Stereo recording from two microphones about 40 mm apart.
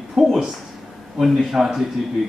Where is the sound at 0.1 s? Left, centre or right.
Centre.